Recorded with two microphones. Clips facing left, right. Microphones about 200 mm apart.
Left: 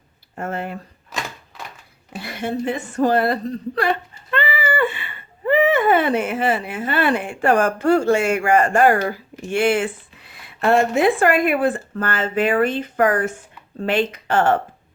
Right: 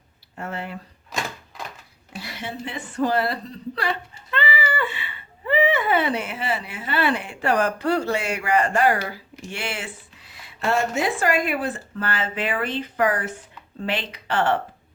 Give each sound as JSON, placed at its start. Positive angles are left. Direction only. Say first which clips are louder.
{"t": 0.3, "sound": "speech", "louder": "left 5 dB", "side_deg": 50}
{"t": 2.1, "sound": "a woman's voice", "louder": "left 8 dB", "side_deg": 55}